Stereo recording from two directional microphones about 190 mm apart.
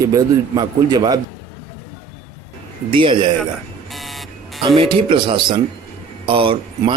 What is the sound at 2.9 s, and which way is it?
Speech, 25° right (ahead or behind).